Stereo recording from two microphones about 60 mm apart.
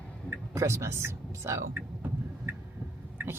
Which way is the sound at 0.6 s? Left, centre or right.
Right.